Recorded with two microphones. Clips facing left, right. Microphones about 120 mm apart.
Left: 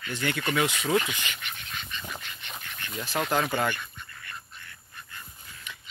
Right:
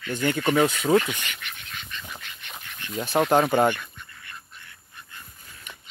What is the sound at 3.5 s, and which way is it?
Speech, 25° right (ahead or behind).